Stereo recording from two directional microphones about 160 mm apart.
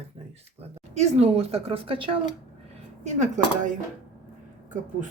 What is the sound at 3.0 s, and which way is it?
Speech, 45° right (ahead or behind).